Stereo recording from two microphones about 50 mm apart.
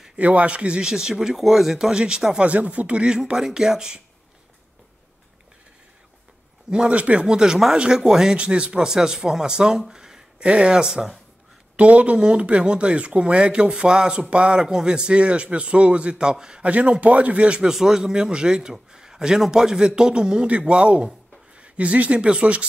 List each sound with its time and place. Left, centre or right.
0.2 s speech: right
2.4 s a man's voice: right
3.3 s speech: centre
6.7 s a man's voice: right
7.2 s speech: centre
8.4 s speech: right
10.4 s speech: right
11.7 s a man's voice: right
16.6 s a man's voice: right
17.6 s speech: centre
20.4 s a man's voice: right